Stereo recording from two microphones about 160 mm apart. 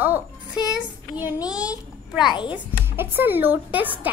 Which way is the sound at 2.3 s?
30° left (ahead or behind).